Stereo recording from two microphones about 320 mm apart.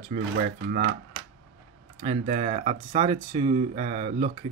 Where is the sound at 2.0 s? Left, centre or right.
Right.